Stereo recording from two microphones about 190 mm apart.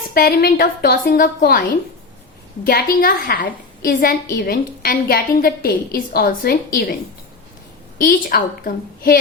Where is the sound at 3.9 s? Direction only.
60° left (ahead or behind).